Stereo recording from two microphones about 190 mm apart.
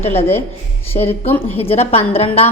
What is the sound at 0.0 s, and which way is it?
A woman's voice, 35° left (ahead or behind).